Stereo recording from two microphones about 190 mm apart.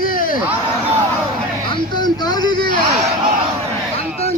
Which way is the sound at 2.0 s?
20° left (ahead or behind).